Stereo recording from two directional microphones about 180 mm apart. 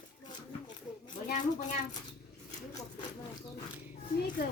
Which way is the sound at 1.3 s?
45° left (ahead or behind).